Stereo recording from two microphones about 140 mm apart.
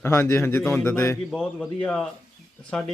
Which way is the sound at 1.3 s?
5° left (ahead or behind).